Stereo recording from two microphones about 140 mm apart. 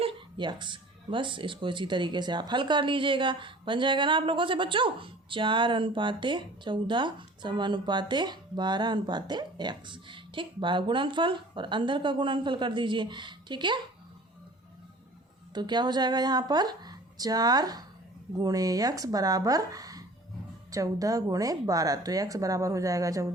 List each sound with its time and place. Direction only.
0.0 s speech: 35° right (ahead or behind)
15.5 s speech: 30° right (ahead or behind)